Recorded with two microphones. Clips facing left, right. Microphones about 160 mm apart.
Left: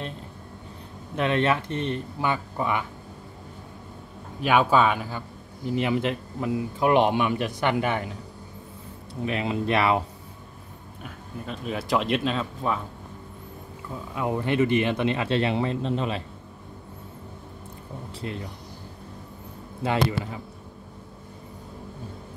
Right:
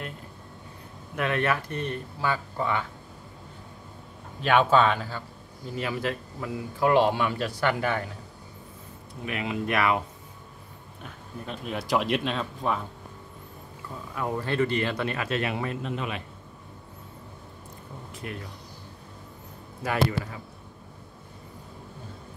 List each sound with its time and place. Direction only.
1.1 s speech: 25° left (ahead or behind)
4.4 s speech: 10° left (ahead or behind)
9.2 s speech: 30° left (ahead or behind)
11.0 s speech: centre (ahead or behind)
14.1 s speech: 15° left (ahead or behind)
18.2 s speech: 25° left (ahead or behind)
19.8 s speech: 25° left (ahead or behind)